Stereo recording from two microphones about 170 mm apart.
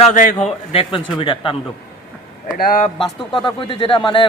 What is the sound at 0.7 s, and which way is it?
Speech, 30° left (ahead or behind).